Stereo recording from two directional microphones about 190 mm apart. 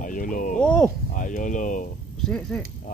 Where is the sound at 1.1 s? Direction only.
40° left (ahead or behind).